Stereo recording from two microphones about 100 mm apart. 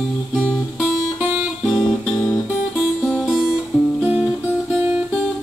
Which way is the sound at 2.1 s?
25° left (ahead or behind).